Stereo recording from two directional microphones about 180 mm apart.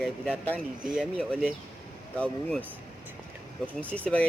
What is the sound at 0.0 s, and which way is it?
Speech, 10° left (ahead or behind).